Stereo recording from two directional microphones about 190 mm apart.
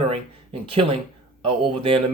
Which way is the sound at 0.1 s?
30° right (ahead or behind).